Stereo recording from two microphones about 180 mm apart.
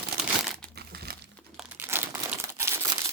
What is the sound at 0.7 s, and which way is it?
Crumpling, 60° right (ahead or behind).